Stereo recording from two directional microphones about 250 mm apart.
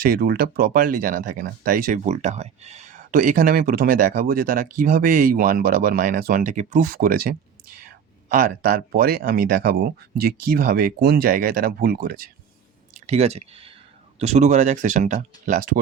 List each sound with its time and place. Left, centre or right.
0.0 s speech: right